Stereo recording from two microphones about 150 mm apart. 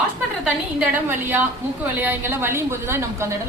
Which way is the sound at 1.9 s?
15° right (ahead or behind).